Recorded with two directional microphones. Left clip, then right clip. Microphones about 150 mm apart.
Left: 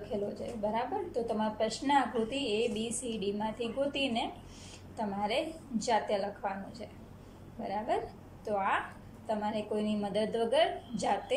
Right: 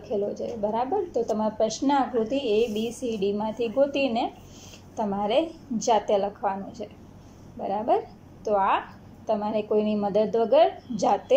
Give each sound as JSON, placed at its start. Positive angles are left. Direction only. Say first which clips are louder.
{"t": 0.1, "sound": "a woman's voice", "louder": "right 9 dB", "side_deg": -20}